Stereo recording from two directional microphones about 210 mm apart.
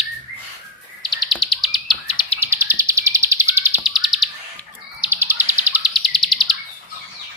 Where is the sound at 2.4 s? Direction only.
10° right (ahead or behind).